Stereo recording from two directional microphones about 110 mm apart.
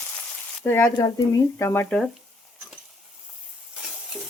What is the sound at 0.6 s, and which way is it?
Speech, 20° left (ahead or behind).